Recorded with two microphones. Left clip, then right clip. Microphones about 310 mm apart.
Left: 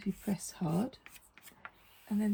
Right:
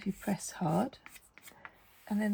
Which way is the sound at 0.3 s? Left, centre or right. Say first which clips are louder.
Right 5 dB; right.